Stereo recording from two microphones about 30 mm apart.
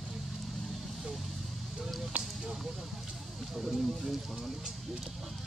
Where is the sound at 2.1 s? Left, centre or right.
Right.